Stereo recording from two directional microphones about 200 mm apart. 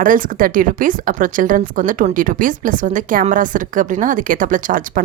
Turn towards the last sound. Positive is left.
turn(degrees=-40)  # may be behind; listen again after turning